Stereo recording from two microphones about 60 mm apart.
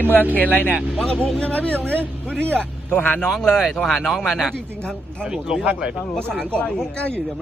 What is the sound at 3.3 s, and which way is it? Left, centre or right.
Speech, centre.